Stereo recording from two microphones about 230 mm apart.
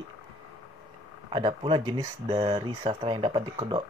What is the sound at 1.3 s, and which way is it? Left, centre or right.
Speech, right.